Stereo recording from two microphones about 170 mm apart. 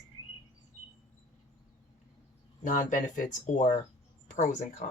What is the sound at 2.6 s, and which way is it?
Speech, 50° left (ahead or behind).